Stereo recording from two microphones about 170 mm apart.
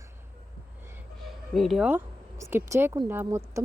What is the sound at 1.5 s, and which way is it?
Speech, centre (ahead or behind).